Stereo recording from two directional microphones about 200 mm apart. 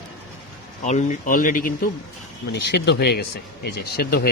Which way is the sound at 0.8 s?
35° left (ahead or behind).